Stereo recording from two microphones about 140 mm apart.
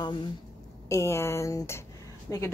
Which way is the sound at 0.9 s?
20° left (ahead or behind).